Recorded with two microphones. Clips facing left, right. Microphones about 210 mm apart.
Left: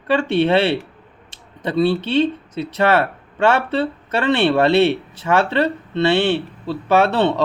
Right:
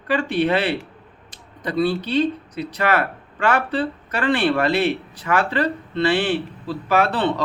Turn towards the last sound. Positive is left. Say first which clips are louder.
# left 4 dB
turn(degrees=25)  # may be behind; listen again after turning